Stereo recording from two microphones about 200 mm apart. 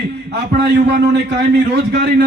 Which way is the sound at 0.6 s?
55° right (ahead or behind).